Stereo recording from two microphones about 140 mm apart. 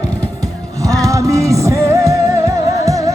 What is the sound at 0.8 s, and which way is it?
Music, 25° right (ahead or behind).